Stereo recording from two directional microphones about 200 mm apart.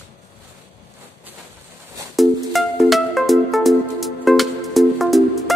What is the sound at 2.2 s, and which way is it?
Music, centre (ahead or behind).